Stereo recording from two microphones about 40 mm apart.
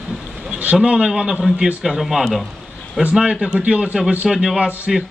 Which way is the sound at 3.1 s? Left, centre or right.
Right.